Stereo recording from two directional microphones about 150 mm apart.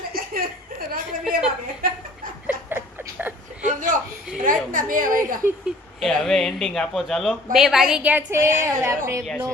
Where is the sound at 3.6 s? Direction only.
60° right (ahead or behind).